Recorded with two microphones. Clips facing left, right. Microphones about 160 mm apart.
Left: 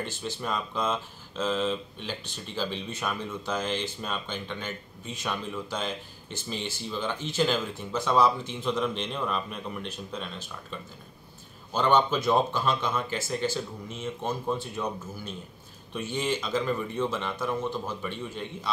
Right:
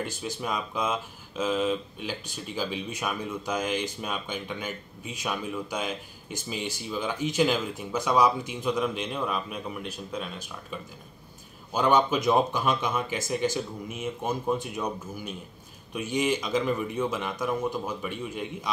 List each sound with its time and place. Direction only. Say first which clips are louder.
0.0 s speech: right 1 dB; 10° right (ahead or behind)